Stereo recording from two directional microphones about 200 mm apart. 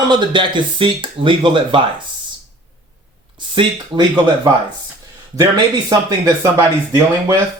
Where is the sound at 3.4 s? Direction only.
25° right (ahead or behind).